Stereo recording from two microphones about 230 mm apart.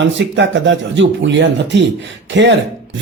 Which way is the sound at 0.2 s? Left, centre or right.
Right.